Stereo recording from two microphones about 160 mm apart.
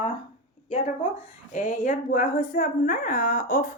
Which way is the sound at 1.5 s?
55° left (ahead or behind).